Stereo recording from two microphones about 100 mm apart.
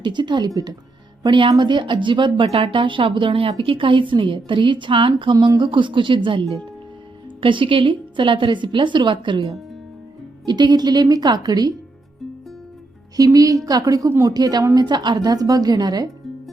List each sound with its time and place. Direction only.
0.0 s a woman's voice: 50° right (ahead or behind)
1.2 s a woman's voice: 55° right (ahead or behind)
13.1 s a woman's voice: 35° right (ahead or behind)